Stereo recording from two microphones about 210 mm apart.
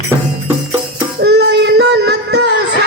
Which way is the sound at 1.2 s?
50° right (ahead or behind).